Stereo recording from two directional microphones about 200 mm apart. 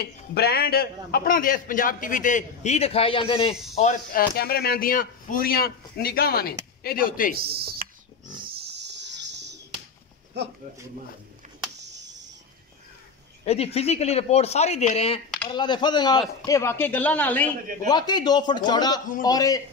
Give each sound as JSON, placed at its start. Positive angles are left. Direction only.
{"t": 0.0, "sound": "speech", "side_deg": 55}
{"t": 3.7, "sound": "speech", "side_deg": 40}
{"t": 7.3, "sound": "speech", "side_deg": -50}
{"t": 8.5, "sound": "a sound", "side_deg": -55}
{"t": 10.4, "sound": "speech", "side_deg": -60}
{"t": 11.8, "sound": "a sound", "side_deg": -60}
{"t": 13.5, "sound": "speech", "side_deg": 30}
{"t": 17.8, "sound": "a man's voice", "side_deg": 20}